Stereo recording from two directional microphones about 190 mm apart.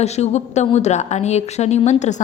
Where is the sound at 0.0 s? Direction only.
35° left (ahead or behind).